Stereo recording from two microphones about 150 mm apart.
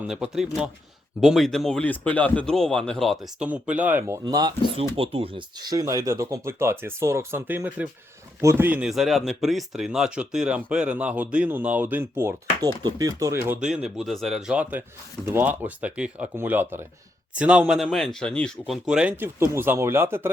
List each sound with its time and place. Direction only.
0.1 s speech: 5° right (ahead or behind)
3.4 s speech: 10° right (ahead or behind); by 4.5 s 25° right (ahead or behind)
4.9 s speech: 40° right (ahead or behind); by 18.5 s 5° left (ahead or behind)
18.6 s speech: 5° right (ahead or behind)